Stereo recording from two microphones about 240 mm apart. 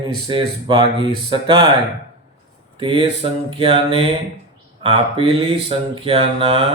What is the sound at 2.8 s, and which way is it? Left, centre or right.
Speech, right.